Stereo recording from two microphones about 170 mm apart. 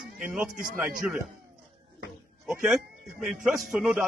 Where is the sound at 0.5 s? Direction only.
55° right (ahead or behind).